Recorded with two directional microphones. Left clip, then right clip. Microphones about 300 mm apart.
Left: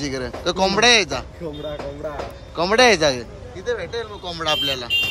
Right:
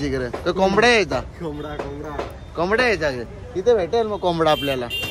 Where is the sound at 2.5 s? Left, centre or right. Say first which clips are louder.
Left 4 dB; centre.